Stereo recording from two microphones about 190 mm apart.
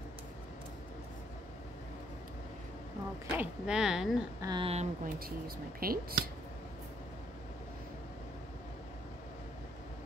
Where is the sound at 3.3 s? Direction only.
5° right (ahead or behind).